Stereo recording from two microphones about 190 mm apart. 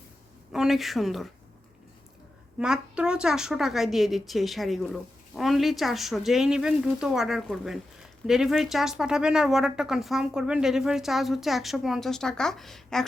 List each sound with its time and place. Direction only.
0.5 s speech: centre (ahead or behind)
2.6 s speech: 5° right (ahead or behind)